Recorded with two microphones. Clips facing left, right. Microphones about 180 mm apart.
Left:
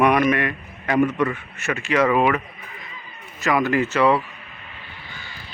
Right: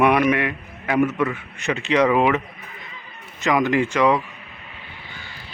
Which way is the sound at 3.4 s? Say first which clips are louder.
Right 1 dB; 15° right (ahead or behind).